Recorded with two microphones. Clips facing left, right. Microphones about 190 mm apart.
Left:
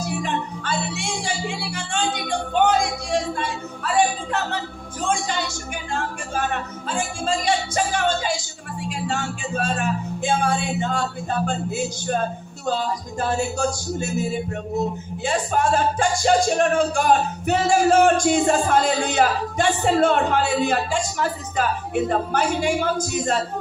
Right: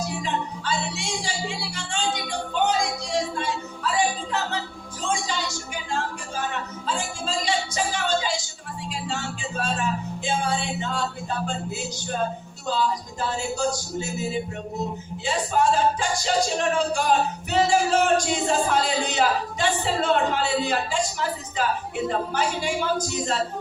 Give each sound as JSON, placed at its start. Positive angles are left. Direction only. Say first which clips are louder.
{"t": 0.1, "sound": "speech", "louder": "left 3 dB", "side_deg": 55}
{"t": 5.9, "sound": "music", "louder": "left 2 dB", "side_deg": 55}
{"t": 15.2, "sound": "music", "louder": "left 1 dB", "side_deg": 50}